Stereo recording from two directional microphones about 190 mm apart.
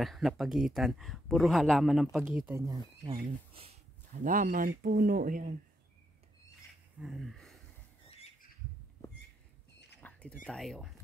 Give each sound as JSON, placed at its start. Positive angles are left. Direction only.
{"t": 0.0, "sound": "speech", "side_deg": 0}
{"t": 4.2, "sound": "speech", "side_deg": -45}
{"t": 7.0, "sound": "speech", "side_deg": 0}
{"t": 9.9, "sound": "a sound", "side_deg": 5}
{"t": 10.4, "sound": "speech", "side_deg": 0}